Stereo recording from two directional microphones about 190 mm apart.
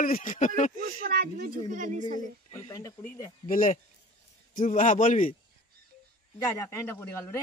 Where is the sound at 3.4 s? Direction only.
45° left (ahead or behind).